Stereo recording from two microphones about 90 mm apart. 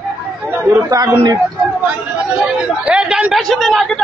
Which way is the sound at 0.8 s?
40° right (ahead or behind).